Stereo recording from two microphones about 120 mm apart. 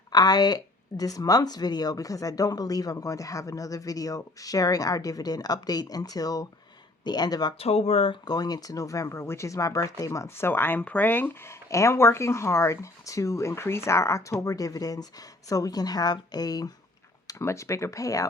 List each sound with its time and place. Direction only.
0.1 s speech: 35° left (ahead or behind)
7.6 s speech: 65° left (ahead or behind)
8.2 s speech: 35° left (ahead or behind)